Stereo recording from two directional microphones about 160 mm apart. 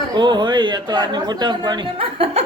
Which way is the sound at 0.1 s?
30° right (ahead or behind).